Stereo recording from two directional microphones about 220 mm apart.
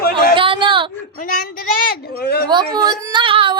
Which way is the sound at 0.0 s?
45° left (ahead or behind).